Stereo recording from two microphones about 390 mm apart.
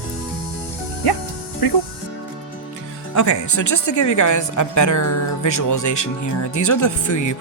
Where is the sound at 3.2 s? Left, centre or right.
Left.